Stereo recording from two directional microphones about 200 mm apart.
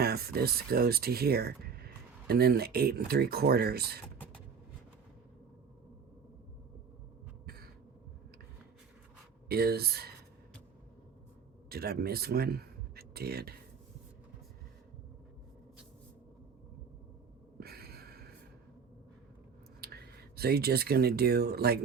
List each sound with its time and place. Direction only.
0.0 s speech: 50° right (ahead or behind)
7.4 s a sound: 50° right (ahead or behind)
9.5 s speech: 50° right (ahead or behind)
11.7 s speech: 50° right (ahead or behind)
17.6 s a sound: 50° right (ahead or behind)
19.8 s speech: 50° right (ahead or behind)